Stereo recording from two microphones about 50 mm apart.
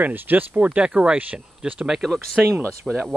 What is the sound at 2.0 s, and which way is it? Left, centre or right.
Speech, centre.